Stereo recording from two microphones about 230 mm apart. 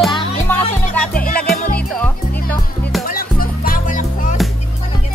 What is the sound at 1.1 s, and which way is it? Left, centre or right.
Music, centre.